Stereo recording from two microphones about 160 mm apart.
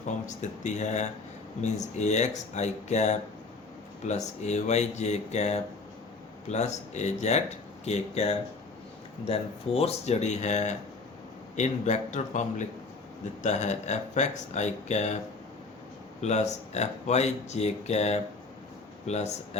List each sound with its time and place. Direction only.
0.0 s speech: 50° left (ahead or behind)
16.2 s speech: 45° left (ahead or behind)